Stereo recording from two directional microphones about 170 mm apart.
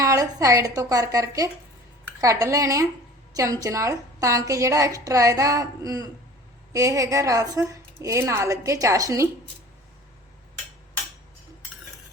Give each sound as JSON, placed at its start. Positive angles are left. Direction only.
{"t": 0.0, "sound": "a woman's voice", "side_deg": -20}